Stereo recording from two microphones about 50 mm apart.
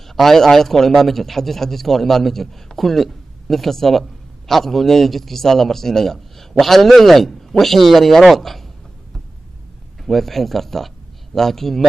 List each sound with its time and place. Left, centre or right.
0.1 s a man's voice: centre
10.0 s a man's voice: centre